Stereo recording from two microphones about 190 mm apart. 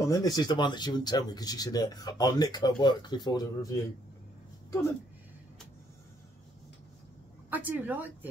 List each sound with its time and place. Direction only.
0.0 s speech: 20° left (ahead or behind)
7.4 s speech: 10° right (ahead or behind)